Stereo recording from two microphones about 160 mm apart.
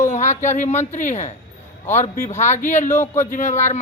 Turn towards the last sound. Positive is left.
turn(degrees=50)  # may be behind; listen again after turning